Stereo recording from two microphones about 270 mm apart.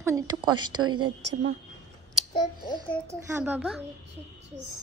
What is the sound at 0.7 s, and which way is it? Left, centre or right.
Speech, right.